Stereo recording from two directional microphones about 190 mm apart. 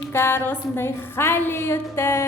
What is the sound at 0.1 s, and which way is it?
A woman's voice, 10° left (ahead or behind).